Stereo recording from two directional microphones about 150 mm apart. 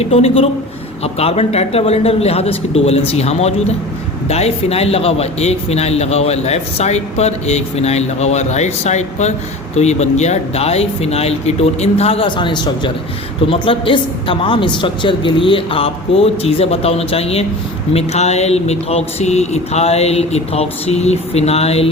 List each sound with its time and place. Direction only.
0.0 s a woman's voice: 40° left (ahead or behind)